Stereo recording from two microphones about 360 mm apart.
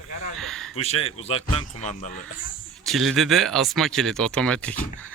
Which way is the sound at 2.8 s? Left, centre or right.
Centre.